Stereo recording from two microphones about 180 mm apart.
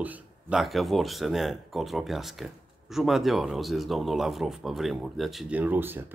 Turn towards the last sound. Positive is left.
turn(degrees=-10)  # may be behind; listen again after turning